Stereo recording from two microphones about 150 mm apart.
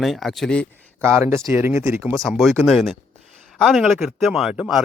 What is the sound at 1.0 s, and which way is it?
Speech, 15° right (ahead or behind).